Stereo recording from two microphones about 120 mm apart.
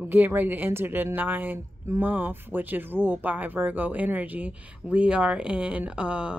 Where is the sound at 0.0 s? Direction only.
15° right (ahead or behind).